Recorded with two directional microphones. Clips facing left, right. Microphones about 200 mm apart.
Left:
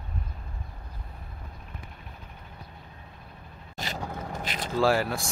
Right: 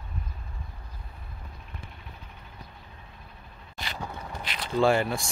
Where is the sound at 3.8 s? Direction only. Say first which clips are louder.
Left 3 dB; 45° left (ahead or behind).